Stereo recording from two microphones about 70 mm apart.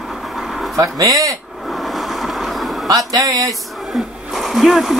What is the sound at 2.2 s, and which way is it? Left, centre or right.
Train, centre.